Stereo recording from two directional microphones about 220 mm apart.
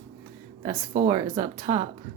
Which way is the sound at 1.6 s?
35° right (ahead or behind).